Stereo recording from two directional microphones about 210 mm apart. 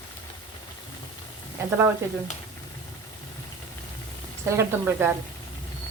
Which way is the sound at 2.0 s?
10° right (ahead or behind).